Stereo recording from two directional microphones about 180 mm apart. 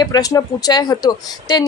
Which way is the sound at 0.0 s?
20° left (ahead or behind).